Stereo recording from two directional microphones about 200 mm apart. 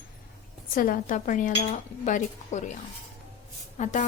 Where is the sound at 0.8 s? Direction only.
45° left (ahead or behind).